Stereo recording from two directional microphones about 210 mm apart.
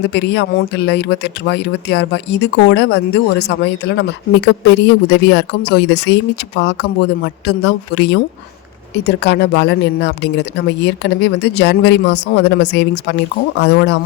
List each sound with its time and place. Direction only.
0.0 s speech: 55° left (ahead or behind)
7.2 s speech: 55° left (ahead or behind)